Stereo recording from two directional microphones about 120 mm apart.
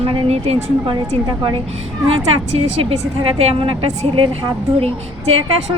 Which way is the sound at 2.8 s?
55° right (ahead or behind).